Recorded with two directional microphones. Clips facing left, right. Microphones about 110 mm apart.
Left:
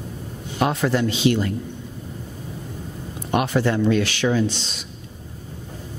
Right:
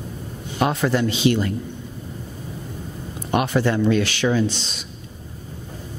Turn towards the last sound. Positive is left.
turn(degrees=-10)  # may be behind; listen again after turning